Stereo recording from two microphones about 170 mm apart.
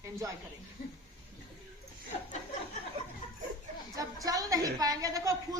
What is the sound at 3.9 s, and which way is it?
A woman's voice, 20° right (ahead or behind).